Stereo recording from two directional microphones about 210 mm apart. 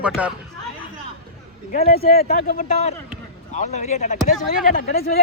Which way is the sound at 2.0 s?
45° left (ahead or behind).